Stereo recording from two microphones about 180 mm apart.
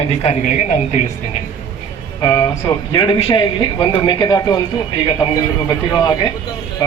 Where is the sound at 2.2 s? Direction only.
20° left (ahead or behind).